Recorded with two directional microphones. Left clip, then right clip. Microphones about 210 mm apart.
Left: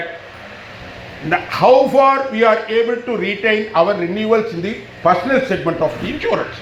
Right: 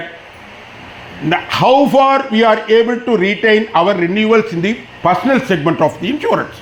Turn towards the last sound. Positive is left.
turn(degrees=-55)  # may be behind; listen again after turning